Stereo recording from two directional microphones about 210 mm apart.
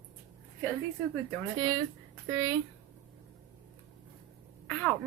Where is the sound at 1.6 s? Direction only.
20° right (ahead or behind).